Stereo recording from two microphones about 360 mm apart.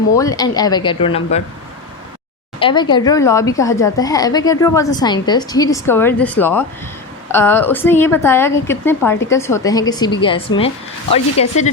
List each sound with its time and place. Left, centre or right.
0.2 s a woman's voice: centre
2.6 s a woman's voice: centre